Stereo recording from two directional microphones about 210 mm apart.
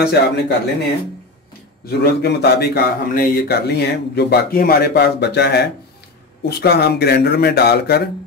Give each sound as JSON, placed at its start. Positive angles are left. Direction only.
{"t": 0.0, "sound": "a man's voice", "side_deg": 50}
{"t": 1.9, "sound": "a man's voice", "side_deg": 50}